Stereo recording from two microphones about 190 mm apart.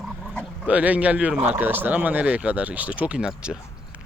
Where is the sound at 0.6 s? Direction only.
5° right (ahead or behind).